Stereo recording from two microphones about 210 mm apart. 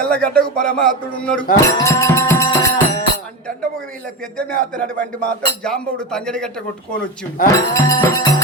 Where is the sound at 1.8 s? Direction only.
15° left (ahead or behind).